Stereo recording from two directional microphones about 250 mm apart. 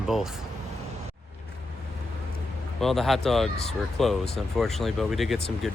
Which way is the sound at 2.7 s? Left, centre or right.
Centre.